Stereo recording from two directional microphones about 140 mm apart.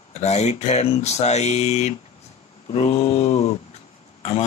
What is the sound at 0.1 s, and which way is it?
Speech, 50° left (ahead or behind).